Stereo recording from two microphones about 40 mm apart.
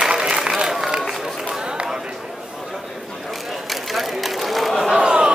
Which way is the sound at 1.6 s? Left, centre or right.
Right.